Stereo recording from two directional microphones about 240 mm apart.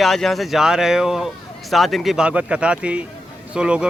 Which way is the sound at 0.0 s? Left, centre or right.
Centre.